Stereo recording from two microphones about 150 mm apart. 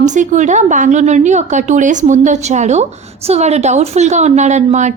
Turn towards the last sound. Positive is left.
turn(degrees=-50)  # may be behind; listen again after turning